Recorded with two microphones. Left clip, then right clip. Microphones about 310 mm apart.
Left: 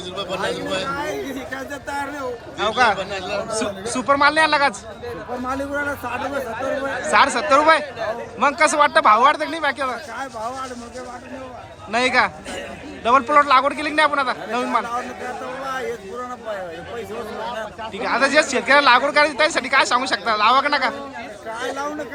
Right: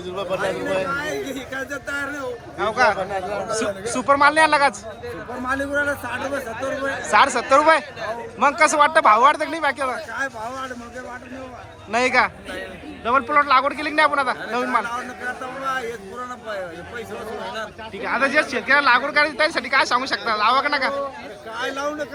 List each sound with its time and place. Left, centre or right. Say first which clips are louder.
0.2 s a man's voice: right 1 dB; centre
2.6 s speech: left 1 dB; centre
6.1 s a man's voice: left 1 dB; left
7.1 s speech: even; centre
11.9 s speech: even; centre
18.0 s speech: left 2 dB; centre